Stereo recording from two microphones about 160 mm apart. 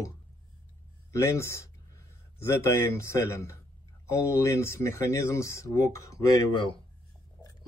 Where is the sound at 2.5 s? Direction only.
15° left (ahead or behind).